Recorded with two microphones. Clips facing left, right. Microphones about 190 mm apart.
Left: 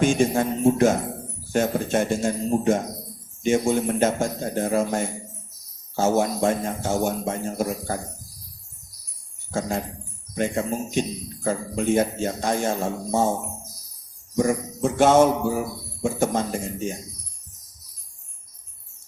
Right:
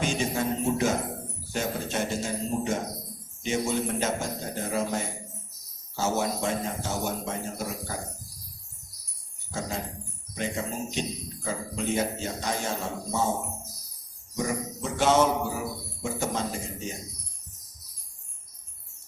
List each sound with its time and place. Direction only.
0.0 s a man's voice: 50° left (ahead or behind)
9.5 s a man's voice: 50° left (ahead or behind)
14.3 s a man's voice: 50° left (ahead or behind)